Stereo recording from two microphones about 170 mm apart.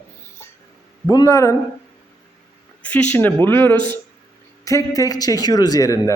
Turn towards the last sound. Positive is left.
turn(degrees=20)  # may be behind; listen again after turning